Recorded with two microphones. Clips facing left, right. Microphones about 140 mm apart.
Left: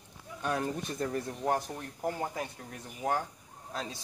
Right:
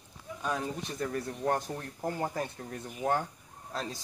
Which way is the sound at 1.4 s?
10° left (ahead or behind).